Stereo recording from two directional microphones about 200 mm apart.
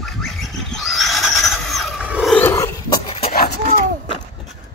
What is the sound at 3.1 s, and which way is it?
Chicken, 30° left (ahead or behind).